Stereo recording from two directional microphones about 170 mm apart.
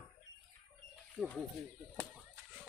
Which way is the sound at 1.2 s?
Centre (ahead or behind).